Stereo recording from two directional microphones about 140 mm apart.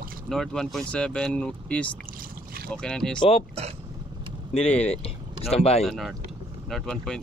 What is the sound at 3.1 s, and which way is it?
Speech, 45° left (ahead or behind).